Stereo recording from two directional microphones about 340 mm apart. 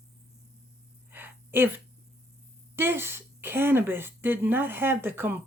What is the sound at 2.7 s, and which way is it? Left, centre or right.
Speech, centre.